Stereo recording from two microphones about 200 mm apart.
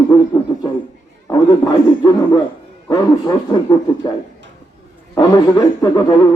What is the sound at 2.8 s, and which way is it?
A man's voice, 20° left (ahead or behind).